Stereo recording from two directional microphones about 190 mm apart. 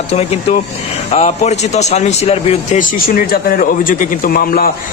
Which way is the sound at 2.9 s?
50° left (ahead or behind).